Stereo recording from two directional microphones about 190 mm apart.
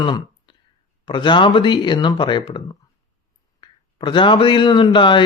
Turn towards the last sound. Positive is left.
turn(degrees=25)  # may be behind; listen again after turning